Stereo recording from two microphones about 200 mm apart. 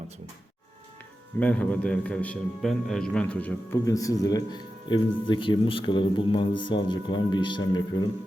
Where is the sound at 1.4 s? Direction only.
5° left (ahead or behind).